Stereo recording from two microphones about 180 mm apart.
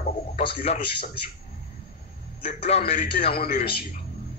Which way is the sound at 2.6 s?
35° left (ahead or behind).